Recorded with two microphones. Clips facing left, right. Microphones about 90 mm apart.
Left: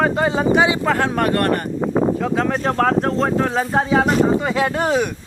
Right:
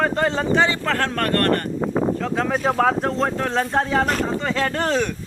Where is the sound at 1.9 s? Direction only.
50° left (ahead or behind).